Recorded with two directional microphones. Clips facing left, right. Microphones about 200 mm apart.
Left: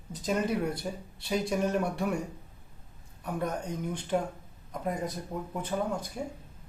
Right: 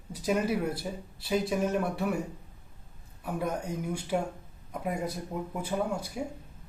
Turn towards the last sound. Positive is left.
turn(degrees=-10)  # may be behind; listen again after turning